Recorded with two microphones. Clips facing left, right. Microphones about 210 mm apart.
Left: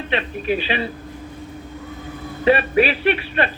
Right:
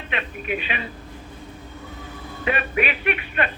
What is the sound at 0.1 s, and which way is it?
Speech, 30° left (ahead or behind).